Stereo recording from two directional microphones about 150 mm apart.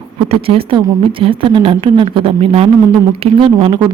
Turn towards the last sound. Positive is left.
turn(degrees=-35)  # may be behind; listen again after turning